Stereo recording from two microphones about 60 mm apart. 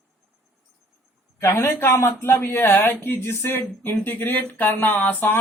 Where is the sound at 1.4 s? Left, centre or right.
Left.